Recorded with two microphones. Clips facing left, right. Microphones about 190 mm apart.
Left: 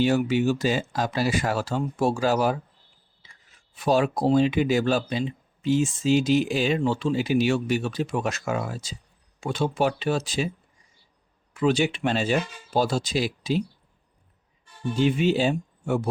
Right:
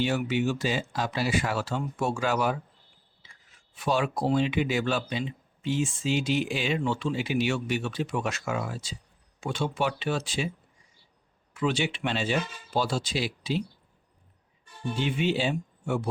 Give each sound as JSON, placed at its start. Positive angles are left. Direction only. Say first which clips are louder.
{"t": 0.0, "sound": "speech", "louder": "left 5 dB", "side_deg": 40}
{"t": 3.8, "sound": "speech", "louder": "left 5 dB", "side_deg": 40}
{"t": 11.6, "sound": "speech", "louder": "left 5 dB", "side_deg": 40}
{"t": 14.9, "sound": "speech", "louder": "left 6 dB", "side_deg": 40}